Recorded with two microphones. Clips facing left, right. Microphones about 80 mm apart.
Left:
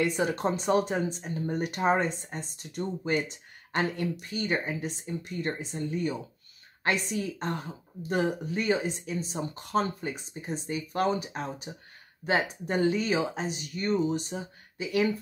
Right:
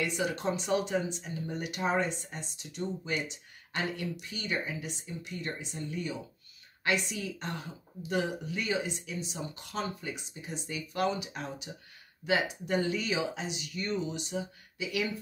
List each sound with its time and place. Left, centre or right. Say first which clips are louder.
0.0 s speech: left 4 dB; left